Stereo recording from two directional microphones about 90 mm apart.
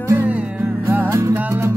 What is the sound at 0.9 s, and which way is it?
Music, 25° right (ahead or behind).